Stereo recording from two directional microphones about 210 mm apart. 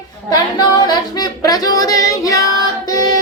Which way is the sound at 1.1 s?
20° left (ahead or behind).